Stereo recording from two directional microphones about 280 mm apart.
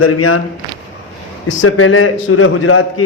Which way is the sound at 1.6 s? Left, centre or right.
Left.